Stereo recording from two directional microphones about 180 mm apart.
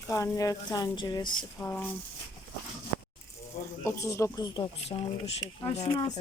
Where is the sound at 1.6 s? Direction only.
10° left (ahead or behind).